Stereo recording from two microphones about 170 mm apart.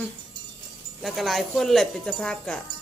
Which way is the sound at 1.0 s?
Centre (ahead or behind).